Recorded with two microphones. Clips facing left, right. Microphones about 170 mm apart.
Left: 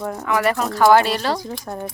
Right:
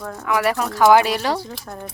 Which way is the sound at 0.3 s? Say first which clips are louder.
Even; 5° right (ahead or behind).